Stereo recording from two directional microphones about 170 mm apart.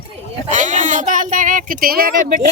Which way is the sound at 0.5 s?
45° right (ahead or behind).